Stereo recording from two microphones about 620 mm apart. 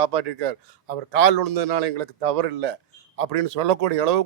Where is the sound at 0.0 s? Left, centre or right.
Right.